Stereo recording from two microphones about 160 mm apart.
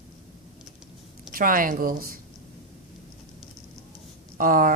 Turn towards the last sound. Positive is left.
turn(degrees=-60)  # may be behind; listen again after turning